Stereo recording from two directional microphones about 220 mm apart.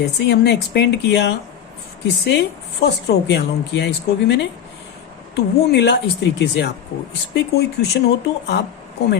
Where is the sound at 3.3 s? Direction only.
50° left (ahead or behind).